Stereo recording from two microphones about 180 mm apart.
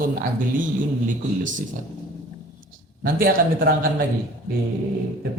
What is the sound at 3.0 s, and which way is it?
Speech, 55° right (ahead or behind).